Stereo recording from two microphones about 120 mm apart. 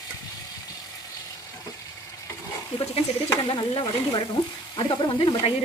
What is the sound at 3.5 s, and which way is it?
Speech, 45° left (ahead or behind).